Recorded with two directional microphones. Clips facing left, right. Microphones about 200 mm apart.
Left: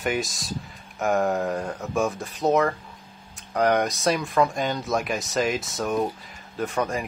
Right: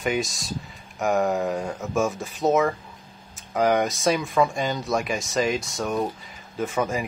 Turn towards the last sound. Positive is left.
turn(degrees=0)  # may be behind; listen again after turning